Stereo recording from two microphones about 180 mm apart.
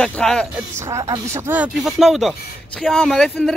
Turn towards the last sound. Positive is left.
turn(degrees=5)  # may be behind; listen again after turning